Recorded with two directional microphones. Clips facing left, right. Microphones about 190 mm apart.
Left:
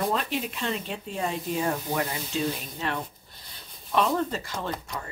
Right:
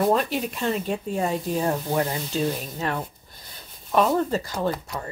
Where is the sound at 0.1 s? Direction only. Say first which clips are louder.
Right 6 dB; 40° right (ahead or behind).